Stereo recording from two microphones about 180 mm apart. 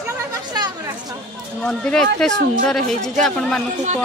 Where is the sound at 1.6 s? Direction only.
5° left (ahead or behind).